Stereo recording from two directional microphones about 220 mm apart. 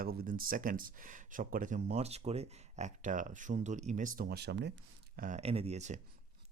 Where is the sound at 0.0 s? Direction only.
40° right (ahead or behind).